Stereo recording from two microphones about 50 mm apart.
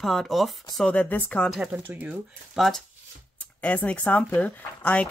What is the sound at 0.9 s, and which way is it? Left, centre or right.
Speech, left.